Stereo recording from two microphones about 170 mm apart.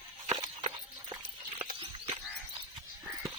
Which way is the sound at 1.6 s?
30° right (ahead or behind).